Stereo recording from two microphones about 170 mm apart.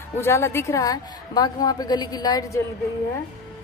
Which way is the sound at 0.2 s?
15° left (ahead or behind).